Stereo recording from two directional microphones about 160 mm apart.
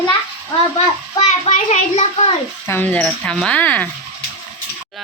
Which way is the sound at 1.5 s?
50° left (ahead or behind).